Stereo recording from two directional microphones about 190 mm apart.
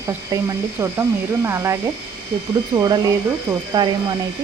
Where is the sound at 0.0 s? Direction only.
15° right (ahead or behind).